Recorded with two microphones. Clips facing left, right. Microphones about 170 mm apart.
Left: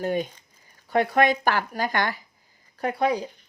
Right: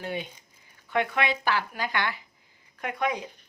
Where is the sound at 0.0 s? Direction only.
45° left (ahead or behind).